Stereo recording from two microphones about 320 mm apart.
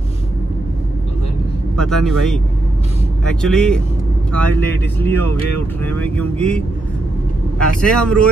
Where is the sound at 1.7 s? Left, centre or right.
Centre.